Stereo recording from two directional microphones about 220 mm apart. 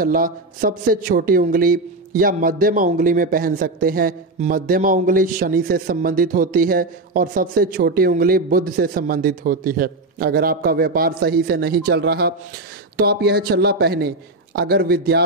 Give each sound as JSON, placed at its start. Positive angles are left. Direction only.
{"t": 0.0, "sound": "a man's voice", "side_deg": -40}